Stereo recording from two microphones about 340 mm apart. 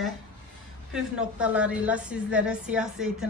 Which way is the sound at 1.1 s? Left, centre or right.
Centre.